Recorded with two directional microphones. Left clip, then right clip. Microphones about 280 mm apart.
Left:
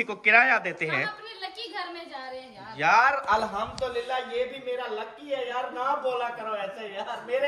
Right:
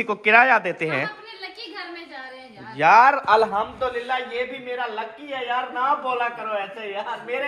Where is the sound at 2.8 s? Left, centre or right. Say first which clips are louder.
Right 7 dB; centre.